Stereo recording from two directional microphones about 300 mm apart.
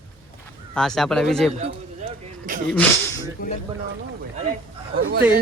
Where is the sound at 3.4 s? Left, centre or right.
Left.